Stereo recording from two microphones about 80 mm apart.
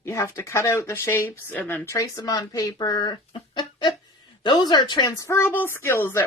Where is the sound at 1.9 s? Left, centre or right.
Left.